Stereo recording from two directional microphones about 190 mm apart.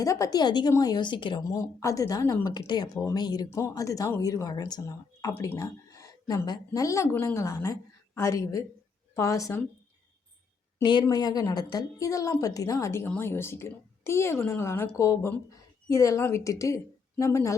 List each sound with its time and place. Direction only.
0.0 s speech: 15° left (ahead or behind)
10.8 s speech: 20° left (ahead or behind)